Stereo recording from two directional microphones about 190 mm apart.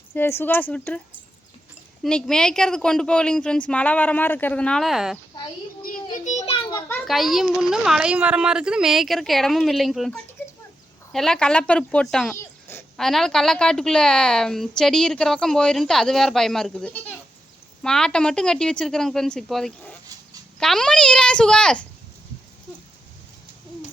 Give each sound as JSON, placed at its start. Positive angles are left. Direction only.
{"t": 0.1, "sound": "speech", "side_deg": 10}
{"t": 2.0, "sound": "a woman's voice", "side_deg": 5}
{"t": 5.8, "sound": "children playing", "side_deg": 45}
{"t": 6.9, "sound": "a woman's voice", "side_deg": 0}
{"t": 12.4, "sound": "a sound", "side_deg": 10}
{"t": 13.1, "sound": "a woman's voice", "side_deg": 0}